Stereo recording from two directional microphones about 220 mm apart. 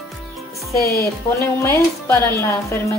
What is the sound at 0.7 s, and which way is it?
Speech, 15° left (ahead or behind).